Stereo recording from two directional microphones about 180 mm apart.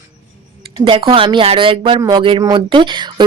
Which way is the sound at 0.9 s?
30° right (ahead or behind).